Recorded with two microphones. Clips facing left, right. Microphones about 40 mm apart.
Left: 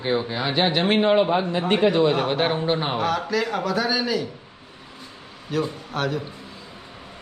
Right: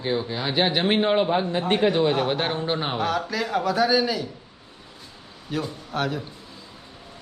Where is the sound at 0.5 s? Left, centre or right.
Centre.